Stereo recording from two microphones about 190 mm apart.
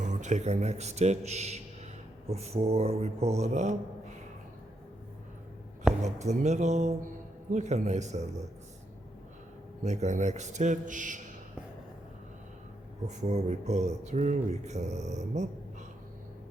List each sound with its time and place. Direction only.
0.0 s speech: 40° right (ahead or behind)
6.0 s speech: 35° right (ahead or behind)
9.8 s speech: 35° right (ahead or behind)
13.1 s speech: 35° right (ahead or behind)